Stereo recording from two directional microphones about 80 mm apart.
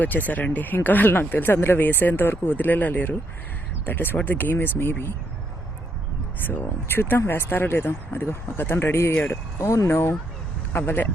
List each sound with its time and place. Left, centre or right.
0.0 s speech: left
6.5 s speech: left
9.1 s speech: centre
9.6 s speech: left